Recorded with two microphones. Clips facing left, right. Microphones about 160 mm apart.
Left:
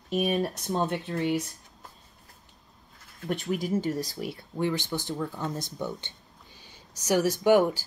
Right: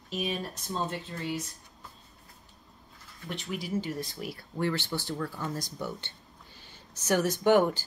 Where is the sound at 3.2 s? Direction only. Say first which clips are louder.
Left 7 dB; 45° left (ahead or behind).